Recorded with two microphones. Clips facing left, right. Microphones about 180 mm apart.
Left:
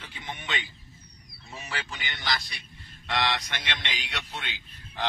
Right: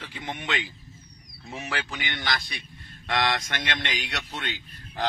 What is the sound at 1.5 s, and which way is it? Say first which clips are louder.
A man's voice: right 5 dB; 60° right (ahead or behind).